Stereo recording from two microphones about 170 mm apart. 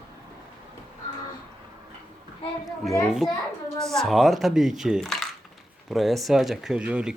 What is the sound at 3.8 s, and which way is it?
Speech, centre (ahead or behind).